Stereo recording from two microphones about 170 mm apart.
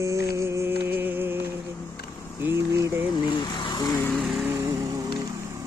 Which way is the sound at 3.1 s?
25° left (ahead or behind).